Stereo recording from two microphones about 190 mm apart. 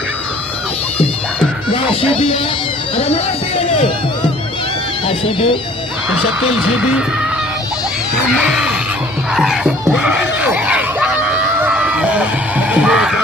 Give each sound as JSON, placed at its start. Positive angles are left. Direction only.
{"t": 1.7, "sound": "music", "side_deg": 30}
{"t": 3.6, "sound": "music", "side_deg": 25}
{"t": 5.0, "sound": "speech", "side_deg": 25}
{"t": 6.1, "sound": "speech", "side_deg": -5}
{"t": 8.3, "sound": "speech", "side_deg": -5}
{"t": 9.3, "sound": "music", "side_deg": 0}
{"t": 9.8, "sound": "screaming", "side_deg": -5}